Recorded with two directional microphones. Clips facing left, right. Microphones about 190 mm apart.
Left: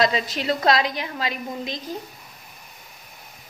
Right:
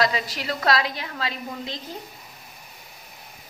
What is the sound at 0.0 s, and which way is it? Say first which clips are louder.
A woman's voice: left 3 dB; 25° left (ahead or behind).